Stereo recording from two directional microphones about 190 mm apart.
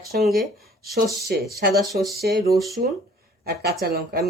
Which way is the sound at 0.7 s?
55° right (ahead or behind).